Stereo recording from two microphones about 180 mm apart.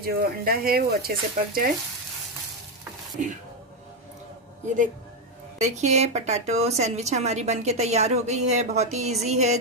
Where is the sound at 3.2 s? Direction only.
45° right (ahead or behind).